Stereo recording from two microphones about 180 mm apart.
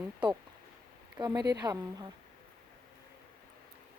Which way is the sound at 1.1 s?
20° right (ahead or behind).